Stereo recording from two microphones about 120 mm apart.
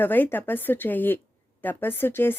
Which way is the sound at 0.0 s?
15° left (ahead or behind).